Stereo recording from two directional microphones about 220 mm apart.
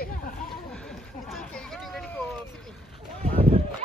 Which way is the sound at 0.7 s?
Centre (ahead or behind).